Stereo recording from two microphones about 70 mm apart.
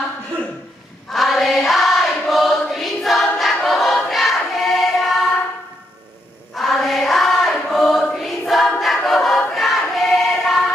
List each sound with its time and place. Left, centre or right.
1.1 s choir: centre
6.5 s choir: centre